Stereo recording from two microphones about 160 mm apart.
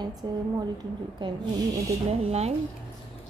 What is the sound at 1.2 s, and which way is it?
Speech, 30° right (ahead or behind).